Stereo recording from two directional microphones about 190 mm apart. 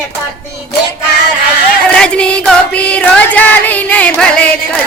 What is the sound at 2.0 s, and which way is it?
Music, 5° left (ahead or behind).